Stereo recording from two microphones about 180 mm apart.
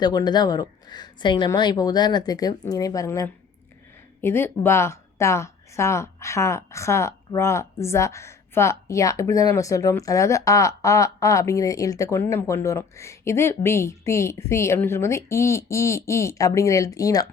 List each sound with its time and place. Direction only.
0.0 s speech: 20° left (ahead or behind)